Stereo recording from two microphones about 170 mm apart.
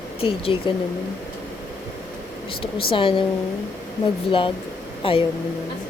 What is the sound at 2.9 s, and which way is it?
Speech, 30° left (ahead or behind).